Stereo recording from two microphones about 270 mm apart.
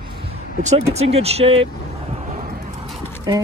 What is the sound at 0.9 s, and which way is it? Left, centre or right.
Speech, right.